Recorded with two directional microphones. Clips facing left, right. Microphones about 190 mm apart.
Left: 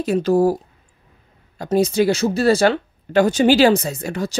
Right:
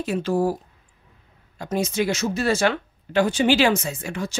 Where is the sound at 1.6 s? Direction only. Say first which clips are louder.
Left 7 dB; 35° left (ahead or behind).